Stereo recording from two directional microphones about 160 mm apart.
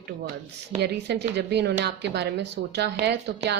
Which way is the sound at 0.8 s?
90° right.